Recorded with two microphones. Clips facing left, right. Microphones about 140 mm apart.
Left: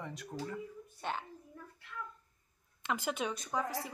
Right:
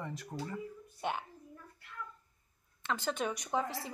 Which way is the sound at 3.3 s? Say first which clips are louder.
Right 1 dB; 20° right (ahead or behind).